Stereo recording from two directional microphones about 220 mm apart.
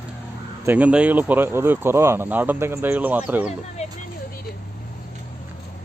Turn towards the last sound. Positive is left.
turn(degrees=30)  # may be behind; listen again after turning